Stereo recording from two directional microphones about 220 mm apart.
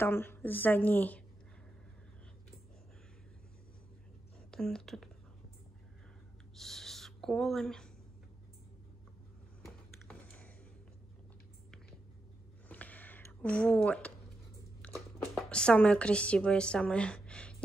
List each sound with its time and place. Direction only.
0.0 s a woman's voice: 10° left (ahead or behind)
4.5 s speech: centre (ahead or behind)
6.5 s a sound: centre (ahead or behind)
12.6 s a sound: 5° left (ahead or behind)
14.8 s biting: 5° left (ahead or behind)
15.3 s a woman's voice: 5° left (ahead or behind)